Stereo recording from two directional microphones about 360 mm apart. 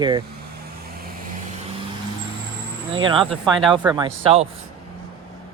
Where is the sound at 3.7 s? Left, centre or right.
Centre.